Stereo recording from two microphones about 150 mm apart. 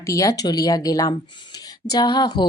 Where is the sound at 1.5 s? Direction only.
25° left (ahead or behind).